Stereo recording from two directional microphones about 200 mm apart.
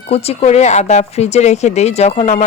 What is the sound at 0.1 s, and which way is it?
Speech, 30° left (ahead or behind).